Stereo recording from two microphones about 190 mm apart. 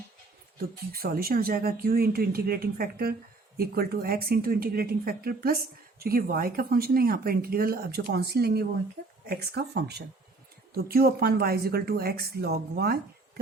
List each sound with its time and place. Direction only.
0.9 s speech: 50° right (ahead or behind)